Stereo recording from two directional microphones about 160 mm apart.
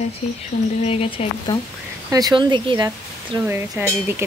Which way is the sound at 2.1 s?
25° right (ahead or behind).